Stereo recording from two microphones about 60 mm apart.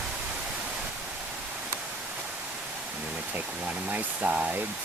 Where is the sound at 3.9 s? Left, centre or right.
Right.